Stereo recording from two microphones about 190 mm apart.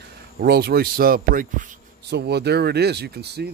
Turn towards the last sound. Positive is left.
turn(degrees=-60)  # may be behind; listen again after turning